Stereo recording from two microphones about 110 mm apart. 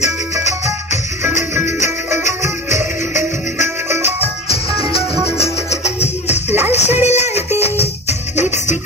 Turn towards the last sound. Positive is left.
turn(degrees=75)  # may be behind; listen again after turning